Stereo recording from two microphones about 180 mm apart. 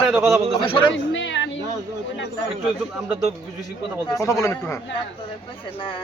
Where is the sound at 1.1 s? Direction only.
90° left.